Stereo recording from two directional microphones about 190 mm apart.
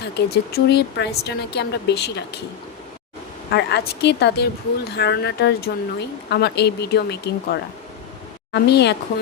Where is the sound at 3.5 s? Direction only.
60° left (ahead or behind).